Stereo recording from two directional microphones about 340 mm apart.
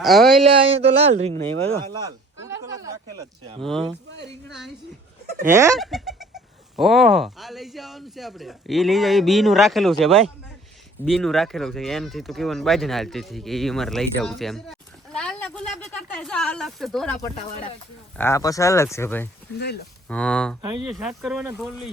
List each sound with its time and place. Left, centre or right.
0.0 s speech: centre
0.4 s speech: centre
1.9 s a sound: centre
3.6 s speech: centre
5.5 s speech: centre
19.5 s speech: left
20.1 s speech: centre